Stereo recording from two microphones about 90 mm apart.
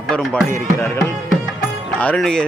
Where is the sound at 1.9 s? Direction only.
15° left (ahead or behind).